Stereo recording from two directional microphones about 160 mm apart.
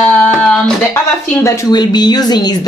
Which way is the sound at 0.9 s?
15° left (ahead or behind).